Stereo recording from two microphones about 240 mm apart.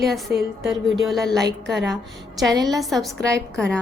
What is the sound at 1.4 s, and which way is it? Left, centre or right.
Speech, right.